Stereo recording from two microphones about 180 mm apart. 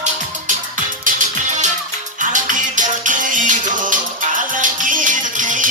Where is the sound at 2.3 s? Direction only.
45° right (ahead or behind).